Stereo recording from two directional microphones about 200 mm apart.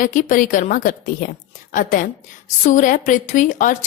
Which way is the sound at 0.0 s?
40° left (ahead or behind).